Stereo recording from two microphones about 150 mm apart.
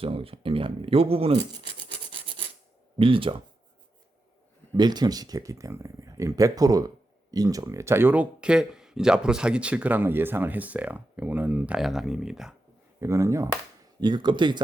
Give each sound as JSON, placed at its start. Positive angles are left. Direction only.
{"t": 0.0, "sound": "speech", "side_deg": -40}
{"t": 2.0, "sound": "filing", "side_deg": -35}
{"t": 3.0, "sound": "speech", "side_deg": -35}
{"t": 4.8, "sound": "speech", "side_deg": -30}
{"t": 13.0, "sound": "speech", "side_deg": -20}
{"t": 14.0, "sound": "speech", "side_deg": -30}